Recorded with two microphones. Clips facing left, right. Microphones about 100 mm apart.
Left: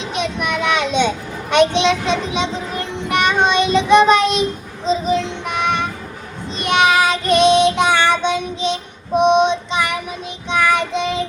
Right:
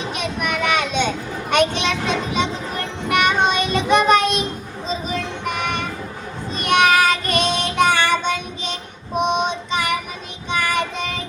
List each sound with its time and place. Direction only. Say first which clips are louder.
0.1 s a sound: left 5 dB; 50° right (ahead or behind)
3.2 s child singing: left 6 dB; 50° right (ahead or behind)
9.1 s female singing: left 7 dB; 50° right (ahead or behind)